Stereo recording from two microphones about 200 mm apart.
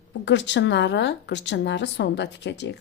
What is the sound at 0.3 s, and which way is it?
A woman's voice, 60° left (ahead or behind).